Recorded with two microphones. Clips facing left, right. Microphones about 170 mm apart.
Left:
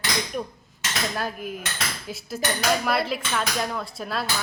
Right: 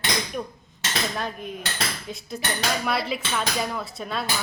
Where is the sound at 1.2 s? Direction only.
5° left (ahead or behind).